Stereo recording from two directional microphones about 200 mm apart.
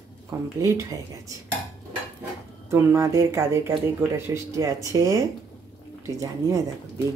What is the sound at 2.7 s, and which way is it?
Speech, 15° right (ahead or behind).